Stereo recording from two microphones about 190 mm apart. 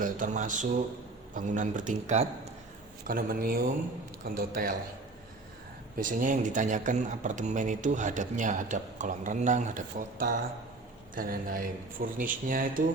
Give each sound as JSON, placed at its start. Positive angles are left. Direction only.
{"t": 0.0, "sound": "speech", "side_deg": -45}
{"t": 3.1, "sound": "speech", "side_deg": -50}
{"t": 6.0, "sound": "speech", "side_deg": -45}